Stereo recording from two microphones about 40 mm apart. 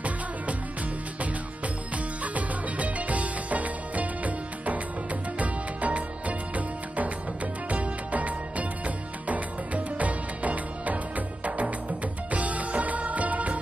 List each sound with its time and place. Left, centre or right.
2.2 s music: right